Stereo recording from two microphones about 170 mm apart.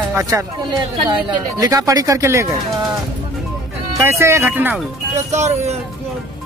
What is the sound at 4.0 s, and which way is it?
Speech, 15° right (ahead or behind).